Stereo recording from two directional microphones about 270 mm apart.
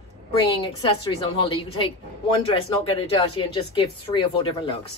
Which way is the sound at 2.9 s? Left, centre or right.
Centre.